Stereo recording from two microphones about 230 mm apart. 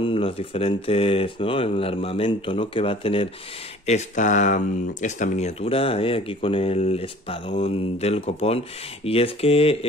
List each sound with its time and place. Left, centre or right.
0.0 s speech: left